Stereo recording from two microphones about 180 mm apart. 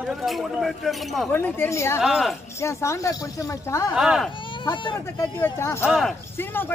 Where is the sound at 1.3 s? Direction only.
10° left (ahead or behind).